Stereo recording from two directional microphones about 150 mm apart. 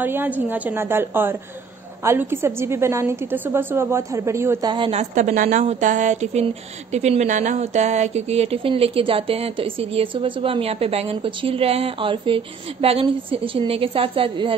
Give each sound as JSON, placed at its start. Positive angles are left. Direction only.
{"t": 0.0, "sound": "a woman's voice", "side_deg": -10}
{"t": 4.6, "sound": "speech", "side_deg": -35}
{"t": 5.1, "sound": "speech", "side_deg": -55}